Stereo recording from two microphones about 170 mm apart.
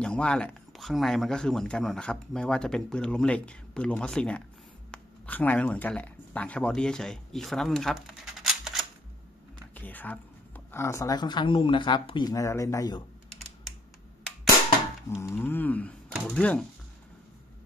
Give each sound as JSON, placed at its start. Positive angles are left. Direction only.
{"t": 0.0, "sound": "speech", "side_deg": 5}
{"t": 9.8, "sound": "a woman's voice", "side_deg": 10}
{"t": 15.0, "sound": "speech", "side_deg": 15}